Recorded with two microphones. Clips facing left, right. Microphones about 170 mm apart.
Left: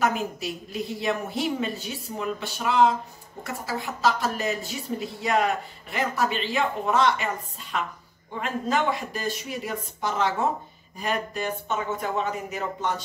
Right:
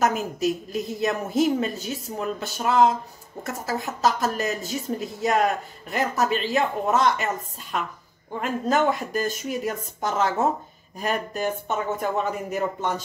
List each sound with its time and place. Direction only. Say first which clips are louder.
0.0 s speech: right 3 dB; 45° right (ahead or behind)
8.4 s speech: right 3 dB; 45° right (ahead or behind)